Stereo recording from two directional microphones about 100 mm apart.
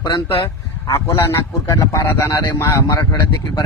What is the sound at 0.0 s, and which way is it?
Speech, 50° left (ahead or behind).